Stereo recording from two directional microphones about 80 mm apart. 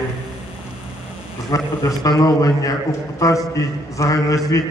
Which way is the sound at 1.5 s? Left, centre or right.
Left.